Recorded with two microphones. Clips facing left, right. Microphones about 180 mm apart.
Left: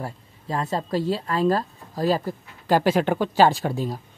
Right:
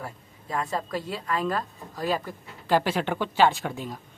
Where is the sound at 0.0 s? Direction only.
30° left (ahead or behind).